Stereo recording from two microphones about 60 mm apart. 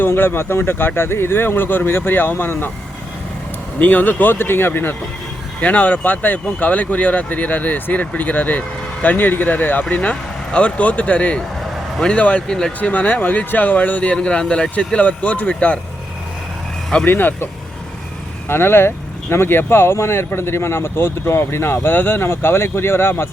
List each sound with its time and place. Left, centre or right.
0.0 s speech: left
3.8 s speech: left
5.5 s speech: left
12.9 s speech: left
17.1 s speech: left